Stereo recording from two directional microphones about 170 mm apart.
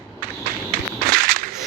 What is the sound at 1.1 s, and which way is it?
Whip, 55° right (ahead or behind).